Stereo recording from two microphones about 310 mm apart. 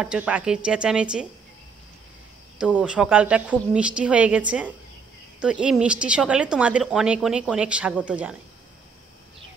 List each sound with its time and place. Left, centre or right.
0.0 s a woman's voice: centre
2.6 s a woman's voice: centre